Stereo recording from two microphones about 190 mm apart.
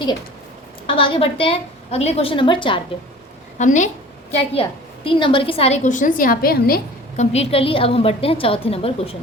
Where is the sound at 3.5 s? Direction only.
40° left (ahead or behind).